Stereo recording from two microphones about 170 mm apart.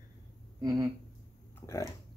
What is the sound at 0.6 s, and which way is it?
Speech, 20° right (ahead or behind).